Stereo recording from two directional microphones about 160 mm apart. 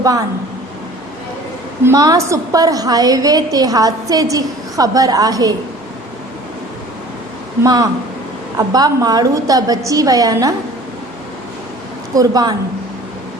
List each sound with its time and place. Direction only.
1.8 s a woman's voice: 20° right (ahead or behind)
7.6 s a woman's voice: 25° right (ahead or behind)
12.1 s a woman's voice: 25° right (ahead or behind)